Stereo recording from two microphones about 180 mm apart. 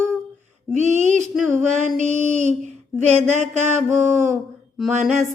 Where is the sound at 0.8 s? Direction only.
40° right (ahead or behind).